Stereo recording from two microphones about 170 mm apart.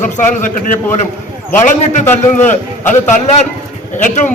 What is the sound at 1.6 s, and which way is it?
Speech, 45° left (ahead or behind).